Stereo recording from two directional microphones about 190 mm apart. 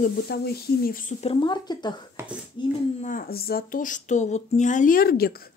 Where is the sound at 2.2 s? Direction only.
15° right (ahead or behind).